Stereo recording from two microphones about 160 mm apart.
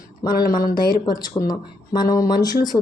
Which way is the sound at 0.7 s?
25° left (ahead or behind).